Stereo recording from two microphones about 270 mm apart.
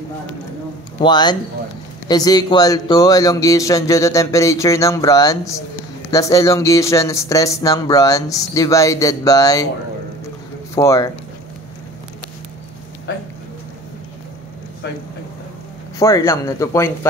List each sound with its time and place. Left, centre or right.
1.0 s speech: centre
10.7 s speech: centre
16.0 s speech: centre